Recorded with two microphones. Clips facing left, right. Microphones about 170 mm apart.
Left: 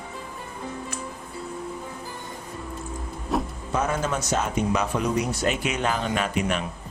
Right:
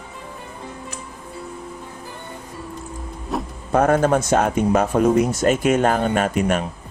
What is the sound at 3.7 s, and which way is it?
Speech, 55° right (ahead or behind).